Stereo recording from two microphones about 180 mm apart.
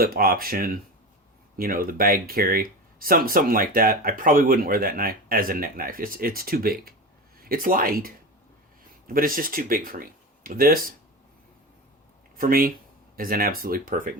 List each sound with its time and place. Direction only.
0.0 s speech: 55° right (ahead or behind)
12.4 s speech: 55° right (ahead or behind)